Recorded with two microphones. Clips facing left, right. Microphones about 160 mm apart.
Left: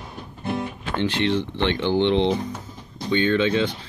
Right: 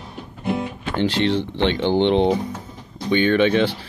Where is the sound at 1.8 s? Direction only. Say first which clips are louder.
Right 2 dB; 55° right (ahead or behind).